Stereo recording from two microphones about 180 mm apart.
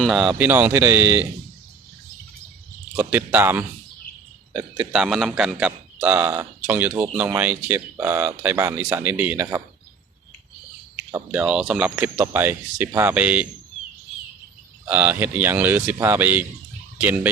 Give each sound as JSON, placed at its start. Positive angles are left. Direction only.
{"t": 0.0, "sound": "speech", "side_deg": -5}
{"t": 2.9, "sound": "speech", "side_deg": -10}
{"t": 11.3, "sound": "speech", "side_deg": -5}
{"t": 14.8, "sound": "speech", "side_deg": -10}